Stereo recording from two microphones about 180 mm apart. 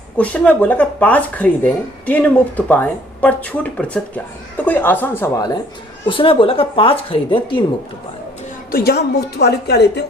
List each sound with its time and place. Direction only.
0.2 s speech: 10° left (ahead or behind)
6.1 s speech: 30° left (ahead or behind)
8.7 s a woman's voice: 60° left (ahead or behind)